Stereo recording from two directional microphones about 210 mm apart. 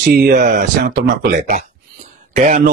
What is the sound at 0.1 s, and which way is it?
Speech, 40° right (ahead or behind).